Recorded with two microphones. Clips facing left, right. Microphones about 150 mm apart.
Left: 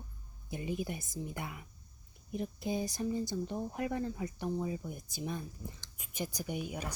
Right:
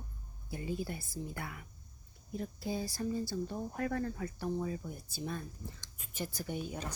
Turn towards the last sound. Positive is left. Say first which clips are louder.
# left 1 dB
turn(degrees=10)  # may be behind; listen again after turning